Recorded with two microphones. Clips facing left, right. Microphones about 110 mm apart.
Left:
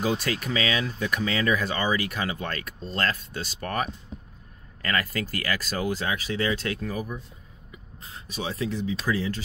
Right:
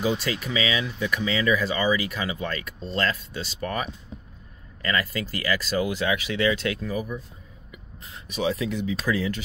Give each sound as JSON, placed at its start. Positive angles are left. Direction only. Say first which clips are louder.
{"t": 0.0, "sound": "speech", "louder": "right 1 dB", "side_deg": 45}